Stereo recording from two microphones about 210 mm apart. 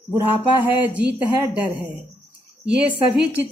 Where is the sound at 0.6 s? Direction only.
10° right (ahead or behind).